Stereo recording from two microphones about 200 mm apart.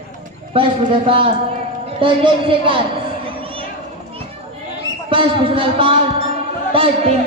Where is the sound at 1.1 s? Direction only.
25° right (ahead or behind).